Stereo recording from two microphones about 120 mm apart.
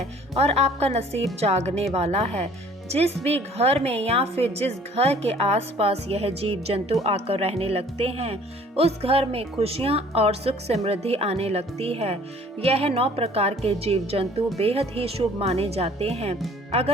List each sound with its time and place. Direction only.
0.3 s speech: 60° right (ahead or behind)